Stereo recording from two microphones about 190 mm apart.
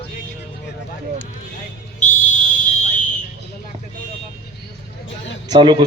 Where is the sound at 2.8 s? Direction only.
40° left (ahead or behind).